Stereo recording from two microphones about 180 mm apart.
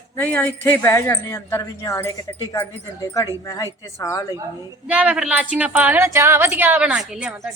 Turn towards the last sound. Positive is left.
turn(degrees=-5)  # may be behind; listen again after turning